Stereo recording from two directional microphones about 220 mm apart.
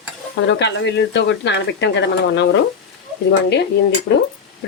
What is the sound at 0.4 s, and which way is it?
Speech, 55° left (ahead or behind).